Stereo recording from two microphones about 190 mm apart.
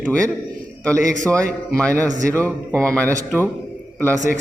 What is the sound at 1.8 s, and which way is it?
Speech, 5° left (ahead or behind).